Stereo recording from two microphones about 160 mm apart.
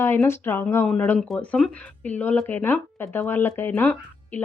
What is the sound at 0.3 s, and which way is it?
Speech, 15° left (ahead or behind).